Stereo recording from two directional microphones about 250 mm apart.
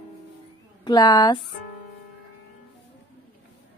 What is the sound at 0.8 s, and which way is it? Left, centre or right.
Speech, centre.